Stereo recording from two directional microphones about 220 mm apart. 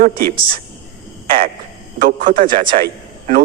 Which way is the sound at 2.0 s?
40° right (ahead or behind).